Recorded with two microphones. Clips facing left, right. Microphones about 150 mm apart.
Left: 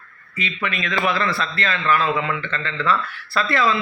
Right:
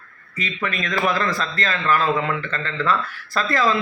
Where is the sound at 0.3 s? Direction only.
40° right (ahead or behind).